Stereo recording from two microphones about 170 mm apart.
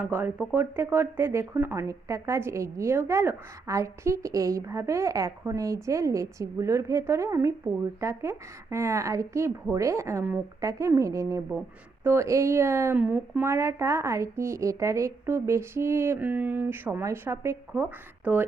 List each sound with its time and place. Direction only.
0.0 s speech: 10° right (ahead or behind)